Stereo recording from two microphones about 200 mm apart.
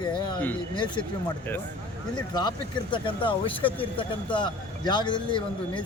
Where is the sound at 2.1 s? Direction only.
20° left (ahead or behind).